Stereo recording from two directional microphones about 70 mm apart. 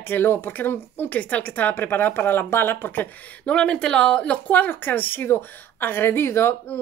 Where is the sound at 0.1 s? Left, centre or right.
Left.